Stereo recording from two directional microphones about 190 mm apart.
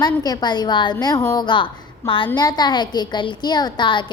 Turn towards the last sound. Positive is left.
turn(degrees=25)  # may be behind; listen again after turning